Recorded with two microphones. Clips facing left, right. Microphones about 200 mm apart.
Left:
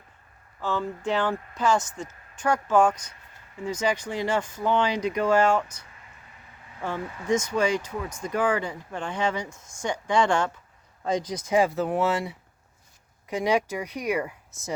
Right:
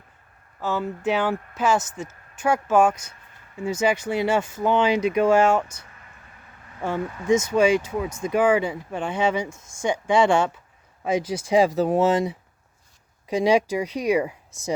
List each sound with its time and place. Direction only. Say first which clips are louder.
0.6 s speech: right 3 dB; 10° right (ahead or behind)
6.8 s speech: right 5 dB; 10° right (ahead or behind)